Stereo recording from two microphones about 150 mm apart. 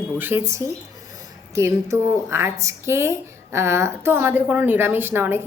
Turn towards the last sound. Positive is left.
turn(degrees=-15)  # may be behind; listen again after turning